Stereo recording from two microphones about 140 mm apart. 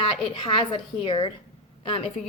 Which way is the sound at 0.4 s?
35° left (ahead or behind).